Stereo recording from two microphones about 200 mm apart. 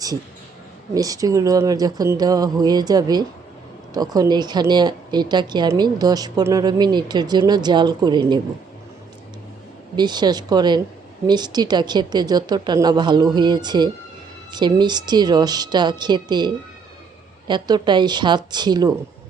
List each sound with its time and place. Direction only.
0.9 s a woman's voice: 20° right (ahead or behind)
9.9 s a woman's voice: 20° right (ahead or behind)
17.5 s a woman's voice: 20° right (ahead or behind)